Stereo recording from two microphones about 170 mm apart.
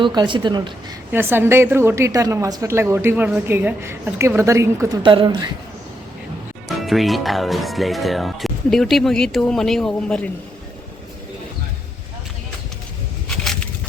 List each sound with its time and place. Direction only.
0.0 s a woman's voice: 25° right (ahead or behind)
1.1 s a woman's voice: 15° right (ahead or behind)
5.0 s a woman's voice: 30° right (ahead or behind)
6.7 s speech: centre (ahead or behind)
13.2 s a sound: 5° left (ahead or behind)